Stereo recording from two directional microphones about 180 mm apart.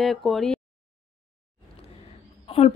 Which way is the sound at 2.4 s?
35° left (ahead or behind).